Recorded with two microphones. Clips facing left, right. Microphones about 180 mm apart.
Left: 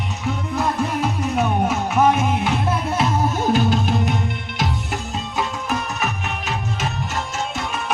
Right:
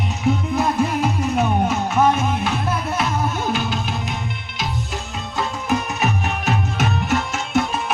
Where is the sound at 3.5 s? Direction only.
45° left (ahead or behind).